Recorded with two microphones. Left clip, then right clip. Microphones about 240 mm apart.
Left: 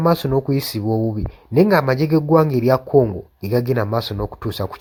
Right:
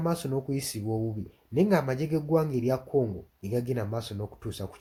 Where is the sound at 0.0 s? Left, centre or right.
Left.